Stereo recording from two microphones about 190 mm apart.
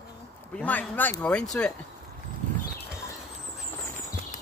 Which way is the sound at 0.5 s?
10° left (ahead or behind).